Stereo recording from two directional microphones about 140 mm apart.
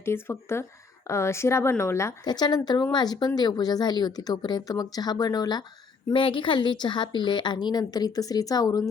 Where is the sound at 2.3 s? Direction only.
30° left (ahead or behind).